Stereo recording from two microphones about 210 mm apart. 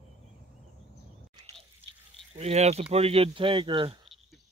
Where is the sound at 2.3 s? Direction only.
30° right (ahead or behind).